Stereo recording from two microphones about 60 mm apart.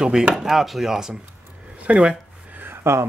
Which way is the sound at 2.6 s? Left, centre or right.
Right.